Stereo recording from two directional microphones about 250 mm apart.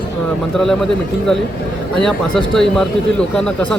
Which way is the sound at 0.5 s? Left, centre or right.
Centre.